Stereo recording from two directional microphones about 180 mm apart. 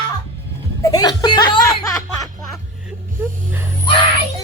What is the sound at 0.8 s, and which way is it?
Speech, 20° left (ahead or behind).